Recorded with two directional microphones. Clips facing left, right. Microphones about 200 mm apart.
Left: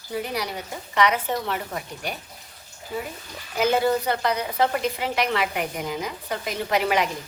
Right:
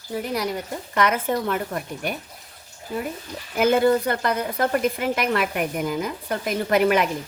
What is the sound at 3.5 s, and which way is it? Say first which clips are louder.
A woman's voice: right 3 dB; 50° right (ahead or behind).